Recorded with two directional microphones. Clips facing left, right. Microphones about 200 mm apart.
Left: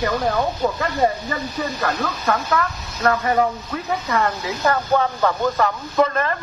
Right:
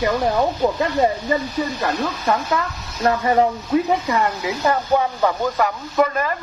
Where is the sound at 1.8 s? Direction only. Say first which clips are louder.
Right 1 dB; 20° right (ahead or behind).